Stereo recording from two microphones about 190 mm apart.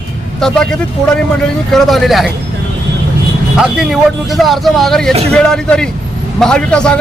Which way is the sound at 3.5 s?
Centre (ahead or behind).